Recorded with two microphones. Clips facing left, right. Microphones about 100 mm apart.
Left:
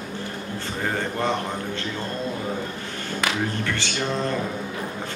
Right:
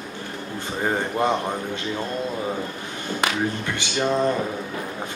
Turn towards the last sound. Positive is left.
turn(degrees=-15)  # may be behind; listen again after turning